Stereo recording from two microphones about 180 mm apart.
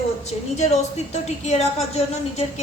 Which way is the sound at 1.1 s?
40° left (ahead or behind).